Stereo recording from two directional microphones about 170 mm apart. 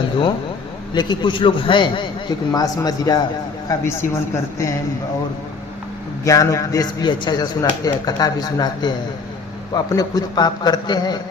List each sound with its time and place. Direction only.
0.9 s a man's voice: 25° left (ahead or behind)
6.2 s speech: 20° left (ahead or behind)